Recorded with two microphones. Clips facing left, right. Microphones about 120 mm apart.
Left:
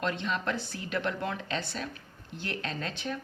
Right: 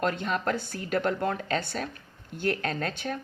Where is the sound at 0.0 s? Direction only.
45° right (ahead or behind).